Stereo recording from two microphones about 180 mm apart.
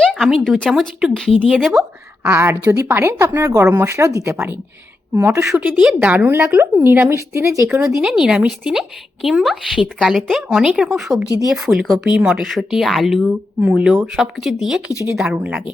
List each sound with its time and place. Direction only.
0.0 s a sound: centre (ahead or behind)
0.4 s a woman's voice: 5° left (ahead or behind); by 7.8 s 15° right (ahead or behind)
7.8 s a woman's voice: 5° right (ahead or behind)